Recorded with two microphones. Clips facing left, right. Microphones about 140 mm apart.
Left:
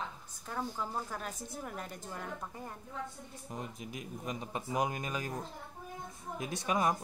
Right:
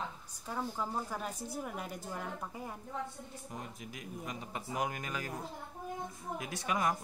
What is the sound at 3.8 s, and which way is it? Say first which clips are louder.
Speech: left 1 dB; 20° left (ahead or behind).